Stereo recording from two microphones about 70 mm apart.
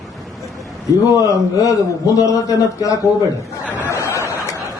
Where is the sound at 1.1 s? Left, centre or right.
Left.